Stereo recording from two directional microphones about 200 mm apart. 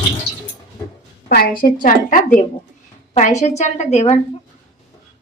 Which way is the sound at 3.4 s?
35° left (ahead or behind).